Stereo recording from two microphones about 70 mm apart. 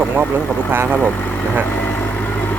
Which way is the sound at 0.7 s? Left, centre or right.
Right.